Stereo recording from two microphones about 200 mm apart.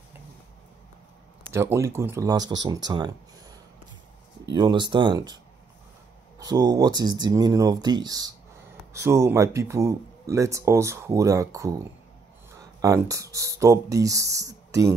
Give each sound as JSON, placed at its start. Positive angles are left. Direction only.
{"t": 1.5, "sound": "speech", "side_deg": -15}
{"t": 4.5, "sound": "speech", "side_deg": -20}
{"t": 6.4, "sound": "speech", "side_deg": -20}
{"t": 12.8, "sound": "speech", "side_deg": -15}